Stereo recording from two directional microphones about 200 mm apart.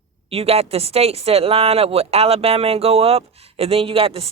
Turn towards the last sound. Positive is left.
turn(degrees=-30)  # may be behind; listen again after turning